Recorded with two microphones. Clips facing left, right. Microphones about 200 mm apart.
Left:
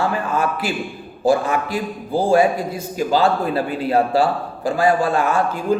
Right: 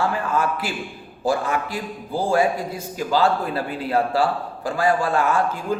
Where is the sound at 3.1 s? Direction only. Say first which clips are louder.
Left 2 dB; 20° left (ahead or behind).